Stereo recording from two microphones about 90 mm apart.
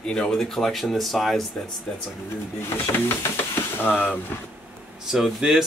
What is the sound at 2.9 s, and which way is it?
Speech, 25° left (ahead or behind).